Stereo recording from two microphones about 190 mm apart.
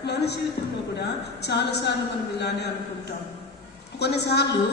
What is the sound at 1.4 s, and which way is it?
Speech, 65° left (ahead or behind).